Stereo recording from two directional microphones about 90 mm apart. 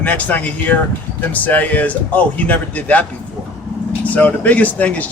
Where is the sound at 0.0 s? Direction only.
15° left (ahead or behind).